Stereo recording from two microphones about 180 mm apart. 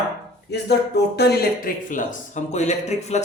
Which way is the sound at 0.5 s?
65° left (ahead or behind).